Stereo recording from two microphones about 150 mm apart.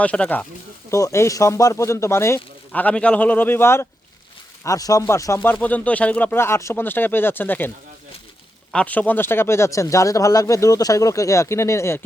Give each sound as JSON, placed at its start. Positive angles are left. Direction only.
{"t": 0.0, "sound": "speech", "side_deg": 10}
{"t": 0.9, "sound": "speech", "side_deg": 20}
{"t": 8.7, "sound": "speech", "side_deg": 10}